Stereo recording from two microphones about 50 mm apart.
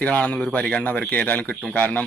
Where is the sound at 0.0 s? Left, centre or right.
Left.